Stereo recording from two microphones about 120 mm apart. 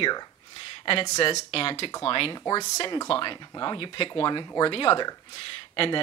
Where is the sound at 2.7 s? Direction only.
35° left (ahead or behind).